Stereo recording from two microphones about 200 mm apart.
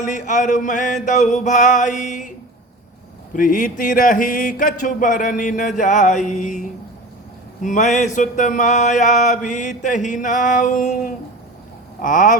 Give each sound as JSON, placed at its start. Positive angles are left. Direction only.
{"t": 0.0, "sound": "mantra", "side_deg": 40}
{"t": 3.3, "sound": "mantra", "side_deg": 40}